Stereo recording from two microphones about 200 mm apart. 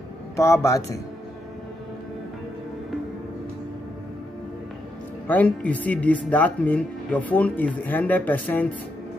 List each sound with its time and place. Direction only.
0.4 s speech: 15° left (ahead or behind)
5.3 s speech: 5° left (ahead or behind)